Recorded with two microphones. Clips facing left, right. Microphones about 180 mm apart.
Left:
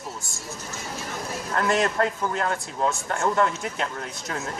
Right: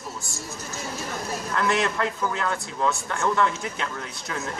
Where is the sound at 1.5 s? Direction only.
45° left (ahead or behind).